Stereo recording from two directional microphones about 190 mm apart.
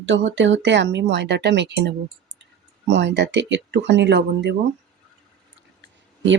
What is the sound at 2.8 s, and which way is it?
Speech, 65° right (ahead or behind).